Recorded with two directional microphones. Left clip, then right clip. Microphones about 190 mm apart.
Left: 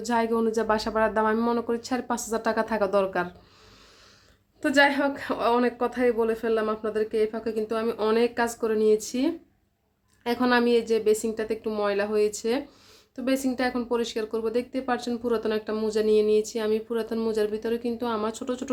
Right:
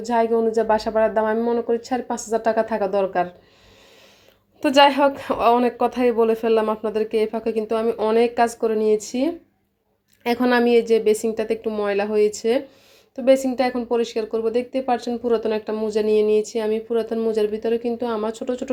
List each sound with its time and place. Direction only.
0.0 s speech: centre (ahead or behind)
4.6 s speech: 20° right (ahead or behind)